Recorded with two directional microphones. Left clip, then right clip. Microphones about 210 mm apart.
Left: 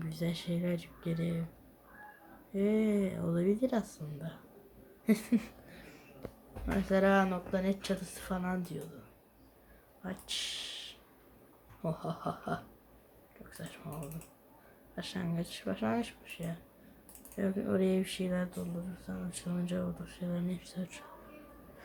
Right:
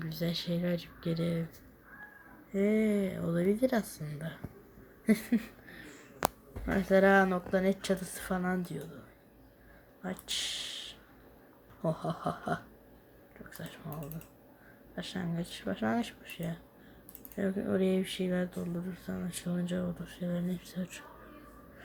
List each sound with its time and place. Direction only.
0.0 s speech: centre (ahead or behind)
2.6 s speech: 10° right (ahead or behind)
2.9 s speech: centre (ahead or behind)
6.7 s speech: 20° right (ahead or behind)
10.0 s speech: 20° right (ahead or behind)
14.9 s speech: 5° right (ahead or behind); by 16.6 s 20° right (ahead or behind)
17.3 s speech: 5° right (ahead or behind)
19.0 s speech: 25° right (ahead or behind)
19.5 s speech: 10° right (ahead or behind)